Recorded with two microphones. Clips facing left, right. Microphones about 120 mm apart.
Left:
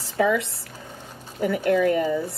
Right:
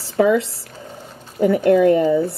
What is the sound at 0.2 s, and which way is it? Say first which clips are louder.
Speech: right 6 dB; 35° right (ahead or behind).